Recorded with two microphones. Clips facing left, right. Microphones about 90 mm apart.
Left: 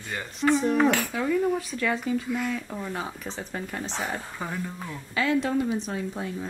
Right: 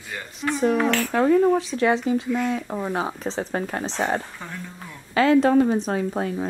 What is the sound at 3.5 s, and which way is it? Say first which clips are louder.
Speech: right 5 dB; 50° right (ahead or behind).